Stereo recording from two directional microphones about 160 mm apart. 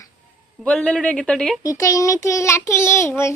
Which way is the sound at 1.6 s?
20° left (ahead or behind).